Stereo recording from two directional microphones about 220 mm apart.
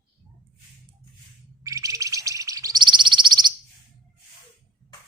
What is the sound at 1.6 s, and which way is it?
Bird, 15° right (ahead or behind).